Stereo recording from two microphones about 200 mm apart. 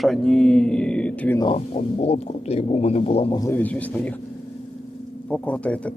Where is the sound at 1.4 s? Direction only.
30° left (ahead or behind).